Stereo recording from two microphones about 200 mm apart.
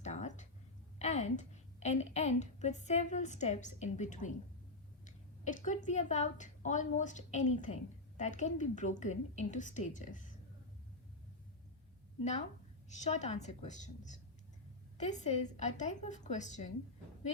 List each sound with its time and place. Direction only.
0.0 s a sound: 35° left (ahead or behind)
0.9 s a woman's voice: 35° left (ahead or behind)
13.1 s a woman's voice: 35° left (ahead or behind)